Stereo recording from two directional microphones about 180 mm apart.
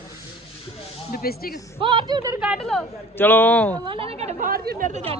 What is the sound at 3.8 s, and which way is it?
A woman's voice, 30° right (ahead or behind).